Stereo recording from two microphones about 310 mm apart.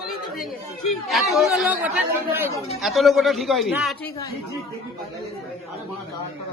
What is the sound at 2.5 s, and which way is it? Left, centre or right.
Speech, centre.